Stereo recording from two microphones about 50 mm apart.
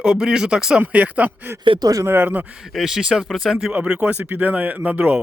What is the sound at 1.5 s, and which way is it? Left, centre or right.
Speech, right.